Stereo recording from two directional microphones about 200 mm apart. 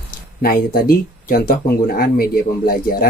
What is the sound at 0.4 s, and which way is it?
Speech, 50° left (ahead or behind).